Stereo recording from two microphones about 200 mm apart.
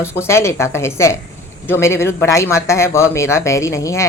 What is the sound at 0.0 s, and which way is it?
A woman's voice, 10° left (ahead or behind).